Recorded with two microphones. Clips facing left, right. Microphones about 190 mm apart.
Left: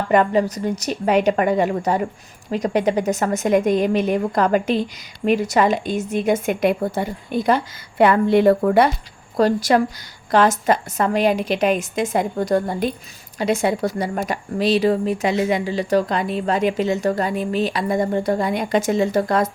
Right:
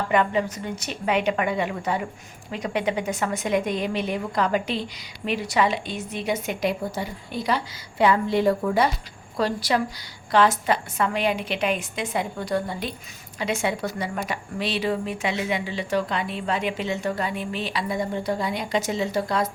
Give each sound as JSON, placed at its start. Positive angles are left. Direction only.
{"t": 0.1, "sound": "a woman's voice", "side_deg": 40}
{"t": 9.4, "sound": "a woman's voice", "side_deg": 45}